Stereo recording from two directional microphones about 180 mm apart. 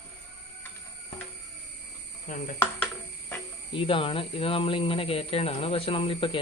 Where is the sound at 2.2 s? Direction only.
45° left (ahead or behind).